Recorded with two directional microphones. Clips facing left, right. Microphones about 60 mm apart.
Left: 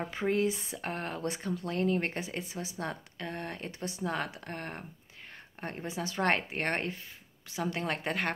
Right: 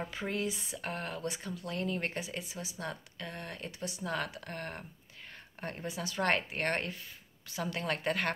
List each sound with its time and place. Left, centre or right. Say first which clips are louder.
0.1 s speech: left 6 dB; left